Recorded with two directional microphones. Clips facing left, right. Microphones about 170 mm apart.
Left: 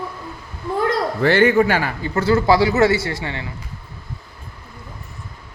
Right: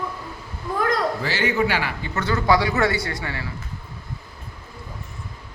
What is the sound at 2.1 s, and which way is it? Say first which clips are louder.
A man's voice: left 5 dB; 30° left (ahead or behind).